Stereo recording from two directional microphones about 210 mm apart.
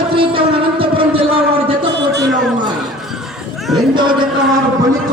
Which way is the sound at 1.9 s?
55° right (ahead or behind).